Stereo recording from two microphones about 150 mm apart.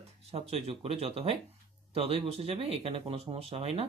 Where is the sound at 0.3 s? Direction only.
40° right (ahead or behind).